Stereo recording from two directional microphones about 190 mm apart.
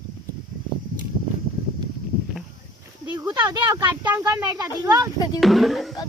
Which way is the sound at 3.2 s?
20° right (ahead or behind).